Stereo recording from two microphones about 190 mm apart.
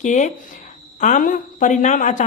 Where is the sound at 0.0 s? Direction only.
40° left (ahead or behind).